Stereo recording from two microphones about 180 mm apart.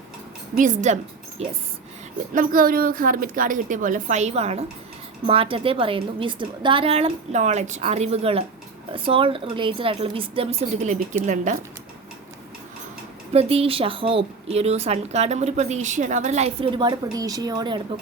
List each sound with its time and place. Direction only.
0.5 s a woman's voice: 45° right (ahead or behind)
2.3 s a woman's voice: 50° right (ahead or behind); by 10.9 s 30° right (ahead or behind)
13.3 s speech: 35° right (ahead or behind)